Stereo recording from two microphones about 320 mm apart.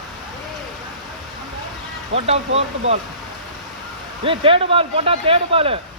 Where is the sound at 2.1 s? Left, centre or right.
Centre.